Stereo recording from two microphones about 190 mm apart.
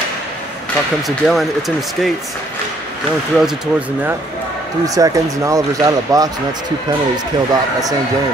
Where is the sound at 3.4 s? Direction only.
5° right (ahead or behind).